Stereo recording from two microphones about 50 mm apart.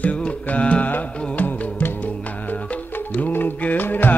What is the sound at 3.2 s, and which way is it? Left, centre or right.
Music, left.